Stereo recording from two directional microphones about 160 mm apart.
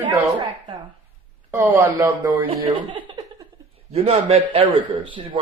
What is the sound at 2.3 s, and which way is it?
A man's voice, 30° right (ahead or behind).